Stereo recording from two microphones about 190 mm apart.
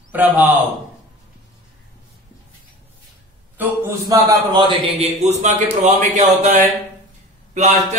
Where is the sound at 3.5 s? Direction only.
15° right (ahead or behind); by 6.5 s 40° right (ahead or behind).